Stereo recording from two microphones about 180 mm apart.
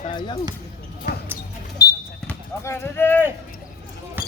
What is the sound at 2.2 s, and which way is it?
Clip-clop, 10° left (ahead or behind).